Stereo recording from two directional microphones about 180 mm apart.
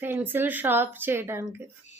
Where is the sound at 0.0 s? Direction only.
10° right (ahead or behind).